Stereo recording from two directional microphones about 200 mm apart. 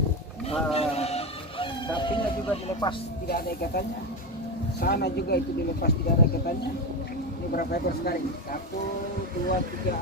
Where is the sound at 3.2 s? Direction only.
50° left (ahead or behind).